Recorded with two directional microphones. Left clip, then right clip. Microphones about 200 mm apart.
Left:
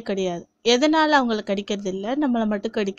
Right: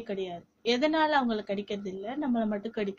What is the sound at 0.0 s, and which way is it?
A woman's voice, 50° left (ahead or behind).